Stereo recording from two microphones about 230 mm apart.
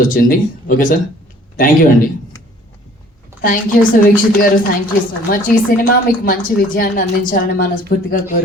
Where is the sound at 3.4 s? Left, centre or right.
Left.